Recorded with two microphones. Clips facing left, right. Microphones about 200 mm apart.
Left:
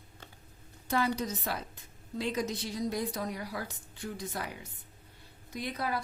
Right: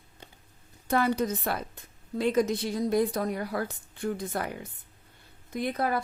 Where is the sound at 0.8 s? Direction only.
55° right (ahead or behind).